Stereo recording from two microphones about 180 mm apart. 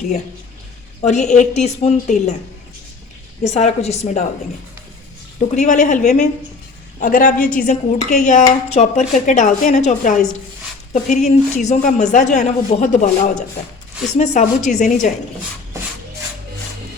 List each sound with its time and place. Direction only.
1.0 s a woman's voice: 40° left (ahead or behind)
3.4 s a woman's voice: 40° left (ahead or behind)
5.4 s a woman's voice: 40° left (ahead or behind)